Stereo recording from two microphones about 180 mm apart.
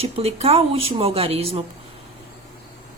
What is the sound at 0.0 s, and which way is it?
Speech, 35° right (ahead or behind).